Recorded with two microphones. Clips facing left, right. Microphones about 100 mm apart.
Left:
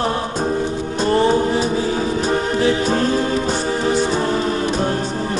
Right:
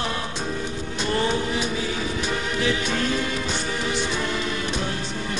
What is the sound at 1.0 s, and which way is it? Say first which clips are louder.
Music: left 8 dB; 35° left (ahead or behind).